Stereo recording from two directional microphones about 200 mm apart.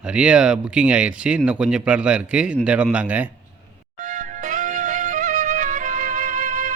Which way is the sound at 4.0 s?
40° right (ahead or behind).